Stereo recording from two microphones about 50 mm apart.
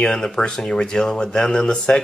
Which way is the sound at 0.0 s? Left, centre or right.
Centre.